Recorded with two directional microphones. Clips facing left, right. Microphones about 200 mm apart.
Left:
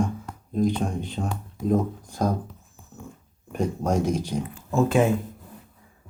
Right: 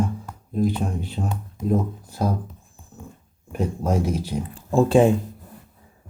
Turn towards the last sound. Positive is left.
turn(degrees=-30)  # may be behind; listen again after turning